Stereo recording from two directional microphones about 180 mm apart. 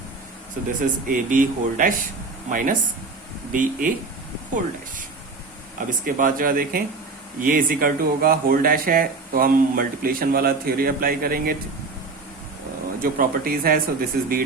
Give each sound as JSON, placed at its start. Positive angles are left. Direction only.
{"t": 0.8, "sound": "speech", "side_deg": -50}
{"t": 6.1, "sound": "speech", "side_deg": -50}
{"t": 13.0, "sound": "speech", "side_deg": -55}